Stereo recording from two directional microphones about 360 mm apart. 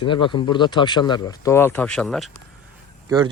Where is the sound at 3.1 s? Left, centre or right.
Centre.